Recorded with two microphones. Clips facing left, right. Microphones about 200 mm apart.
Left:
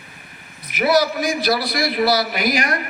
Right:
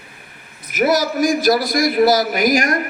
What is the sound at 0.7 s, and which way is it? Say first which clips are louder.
A man's voice: right 1 dB; 45° right (ahead or behind).